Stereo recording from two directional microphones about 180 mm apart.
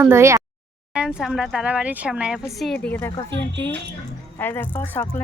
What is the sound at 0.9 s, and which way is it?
Speech, 5° right (ahead or behind).